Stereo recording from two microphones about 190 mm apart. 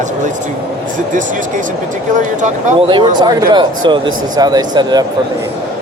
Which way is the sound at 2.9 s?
25° right (ahead or behind).